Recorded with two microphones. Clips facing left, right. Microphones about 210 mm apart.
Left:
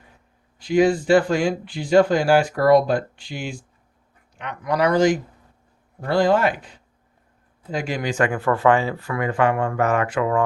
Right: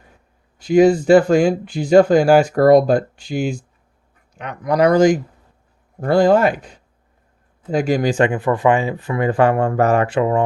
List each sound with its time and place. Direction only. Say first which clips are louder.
0.6 s speech: right 5 dB; 45° right (ahead or behind)
8.2 s speech: right 3 dB; 20° right (ahead or behind)